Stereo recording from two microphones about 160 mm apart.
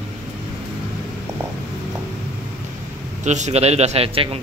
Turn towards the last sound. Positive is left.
turn(degrees=-35)  # may be behind; listen again after turning